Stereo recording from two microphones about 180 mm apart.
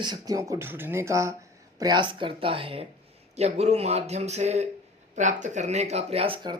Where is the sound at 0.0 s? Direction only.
20° right (ahead or behind).